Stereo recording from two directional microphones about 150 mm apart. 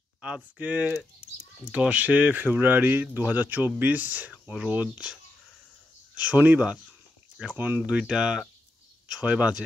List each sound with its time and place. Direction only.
0.6 s speech: 10° right (ahead or behind)
6.3 s speech: 10° right (ahead or behind)